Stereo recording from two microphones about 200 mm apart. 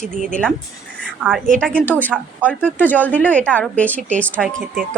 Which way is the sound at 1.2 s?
5° right (ahead or behind).